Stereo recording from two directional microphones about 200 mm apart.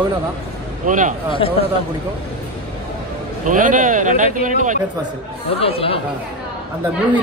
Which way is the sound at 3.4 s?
40° right (ahead or behind).